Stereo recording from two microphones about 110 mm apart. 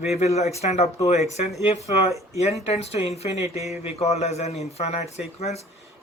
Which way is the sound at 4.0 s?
80° left.